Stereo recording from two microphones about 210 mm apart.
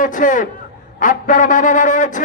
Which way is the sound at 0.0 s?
40° left (ahead or behind).